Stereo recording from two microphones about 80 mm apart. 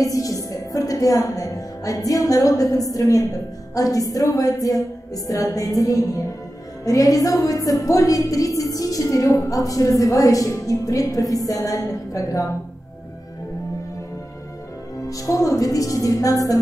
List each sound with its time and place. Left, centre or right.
0.0 s speech: left
15.0 s speech: left